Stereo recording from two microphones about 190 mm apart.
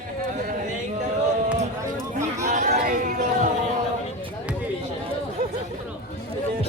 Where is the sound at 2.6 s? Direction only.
50° right (ahead or behind).